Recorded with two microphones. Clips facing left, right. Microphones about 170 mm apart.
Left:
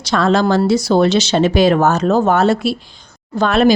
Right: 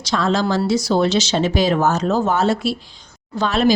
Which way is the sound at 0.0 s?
60° left (ahead or behind).